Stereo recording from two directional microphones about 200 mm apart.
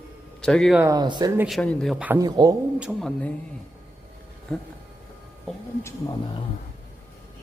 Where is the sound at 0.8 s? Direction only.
20° right (ahead or behind).